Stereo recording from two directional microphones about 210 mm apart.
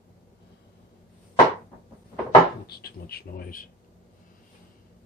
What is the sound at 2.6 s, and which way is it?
Speech, 50° left (ahead or behind).